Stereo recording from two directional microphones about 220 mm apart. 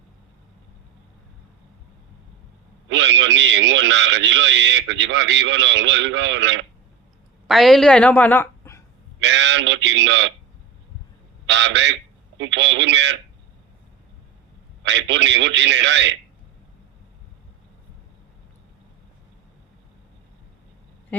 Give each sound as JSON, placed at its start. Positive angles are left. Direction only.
{"t": 2.9, "sound": "a man's voice", "side_deg": -55}
{"t": 7.4, "sound": "a woman's voice", "side_deg": 0}
{"t": 9.2, "sound": "a man's voice", "side_deg": -55}
{"t": 11.4, "sound": "a man's voice", "side_deg": -55}
{"t": 14.8, "sound": "a man's voice", "side_deg": -55}
{"t": 21.1, "sound": "a sound", "side_deg": 5}